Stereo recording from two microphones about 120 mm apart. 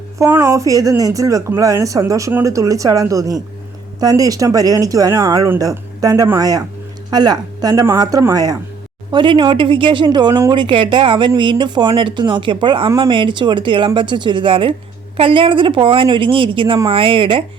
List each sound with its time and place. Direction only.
0.2 s speech: 20° right (ahead or behind)
9.1 s speech: 45° right (ahead or behind)